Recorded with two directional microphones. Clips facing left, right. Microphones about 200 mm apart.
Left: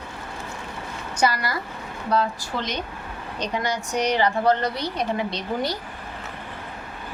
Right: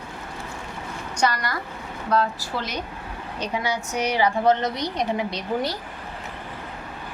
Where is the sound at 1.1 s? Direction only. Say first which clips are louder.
Left 1 dB; 5° left (ahead or behind).